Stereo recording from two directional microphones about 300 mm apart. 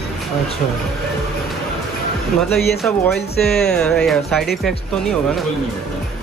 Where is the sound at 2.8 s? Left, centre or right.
Centre.